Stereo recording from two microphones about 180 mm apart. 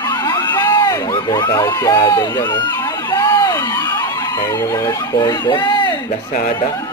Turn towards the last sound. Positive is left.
turn(degrees=45)  # may be behind; listen again after turning